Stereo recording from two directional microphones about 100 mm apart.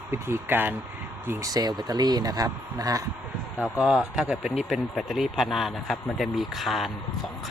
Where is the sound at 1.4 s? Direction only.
40° right (ahead or behind).